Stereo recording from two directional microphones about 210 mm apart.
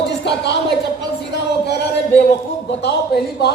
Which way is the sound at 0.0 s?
55° left (ahead or behind).